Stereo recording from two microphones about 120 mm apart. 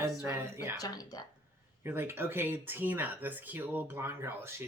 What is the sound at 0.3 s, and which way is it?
Speech, 20° right (ahead or behind).